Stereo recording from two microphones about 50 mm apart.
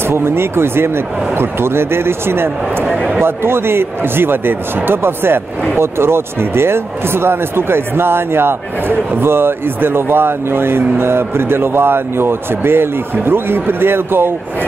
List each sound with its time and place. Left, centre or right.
0.0 s speech: right